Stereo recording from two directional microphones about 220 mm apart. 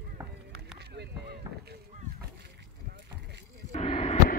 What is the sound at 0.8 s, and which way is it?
Run, 50° right (ahead or behind).